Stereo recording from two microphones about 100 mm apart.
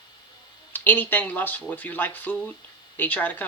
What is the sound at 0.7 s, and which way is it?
Speech, 20° left (ahead or behind).